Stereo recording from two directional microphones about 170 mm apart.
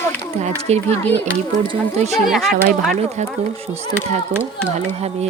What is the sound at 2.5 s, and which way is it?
Speech, 55° right (ahead or behind).